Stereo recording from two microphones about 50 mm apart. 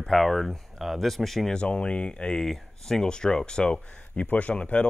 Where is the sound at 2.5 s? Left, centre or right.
Centre.